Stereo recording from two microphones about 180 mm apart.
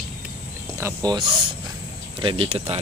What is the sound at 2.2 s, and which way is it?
Speech, 30° right (ahead or behind).